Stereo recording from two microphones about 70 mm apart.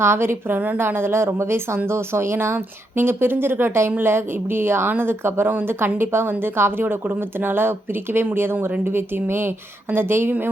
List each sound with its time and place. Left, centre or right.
0.0 s a woman's voice: right